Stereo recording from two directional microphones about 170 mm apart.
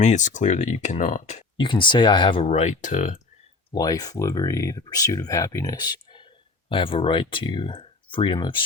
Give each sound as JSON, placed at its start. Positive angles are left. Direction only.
{"t": 0.0, "sound": "speech", "side_deg": 45}
{"t": 1.5, "sound": "speech", "side_deg": 30}
{"t": 3.7, "sound": "speech", "side_deg": 20}